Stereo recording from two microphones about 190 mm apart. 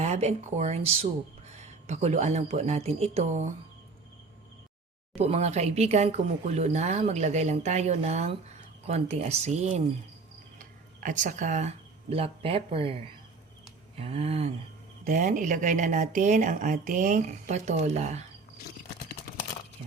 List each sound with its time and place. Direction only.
0.0 s speech: 35° right (ahead or behind)
5.1 s speech: 35° right (ahead or behind)
15.0 s speech: 45° right (ahead or behind)